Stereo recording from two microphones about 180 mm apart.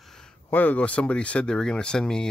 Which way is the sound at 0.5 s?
10° left (ahead or behind).